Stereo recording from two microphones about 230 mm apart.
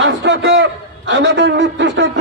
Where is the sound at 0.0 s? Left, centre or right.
Right.